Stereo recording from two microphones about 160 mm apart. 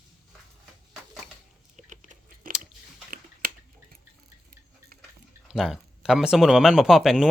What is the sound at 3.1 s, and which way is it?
Biting, 60° right (ahead or behind).